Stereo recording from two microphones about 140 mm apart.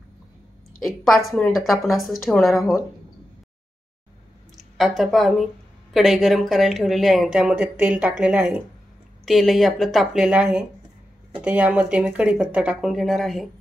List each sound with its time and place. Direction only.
0.8 s speech: centre (ahead or behind)
4.6 s speech: centre (ahead or behind)